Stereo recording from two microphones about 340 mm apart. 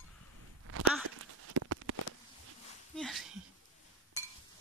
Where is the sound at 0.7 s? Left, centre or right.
Right.